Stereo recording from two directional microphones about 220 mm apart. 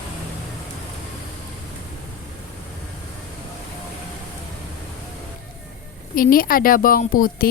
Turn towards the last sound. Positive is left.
turn(degrees=40)  # may be behind; listen again after turning